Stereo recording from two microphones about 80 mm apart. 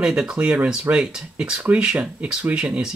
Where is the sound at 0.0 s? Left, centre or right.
Centre.